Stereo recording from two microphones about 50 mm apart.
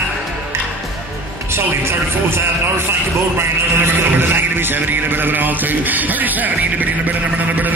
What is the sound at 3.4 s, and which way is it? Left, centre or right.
Music, right.